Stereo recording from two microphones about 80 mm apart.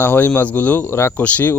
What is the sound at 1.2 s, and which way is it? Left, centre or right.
Speech, centre.